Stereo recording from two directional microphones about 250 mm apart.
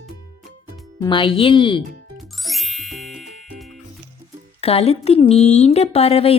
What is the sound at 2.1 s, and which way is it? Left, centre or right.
Ding, centre.